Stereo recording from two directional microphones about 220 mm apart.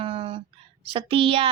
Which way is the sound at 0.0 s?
25° right (ahead or behind).